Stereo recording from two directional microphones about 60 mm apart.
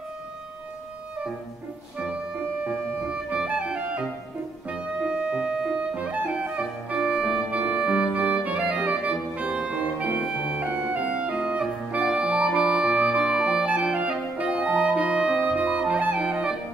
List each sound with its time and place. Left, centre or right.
2.0 s music: right